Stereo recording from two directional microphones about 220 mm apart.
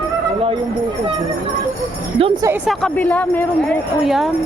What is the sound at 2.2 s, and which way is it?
Speech, 20° right (ahead or behind).